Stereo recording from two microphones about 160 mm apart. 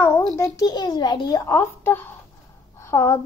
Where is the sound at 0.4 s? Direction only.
25° left (ahead or behind).